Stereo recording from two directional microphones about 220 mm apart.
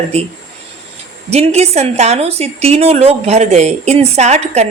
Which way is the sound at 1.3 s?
30° right (ahead or behind).